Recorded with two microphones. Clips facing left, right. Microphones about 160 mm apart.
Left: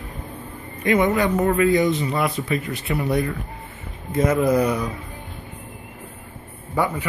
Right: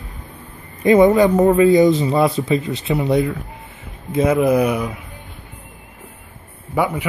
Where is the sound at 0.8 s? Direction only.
35° right (ahead or behind); by 4.8 s 15° right (ahead or behind).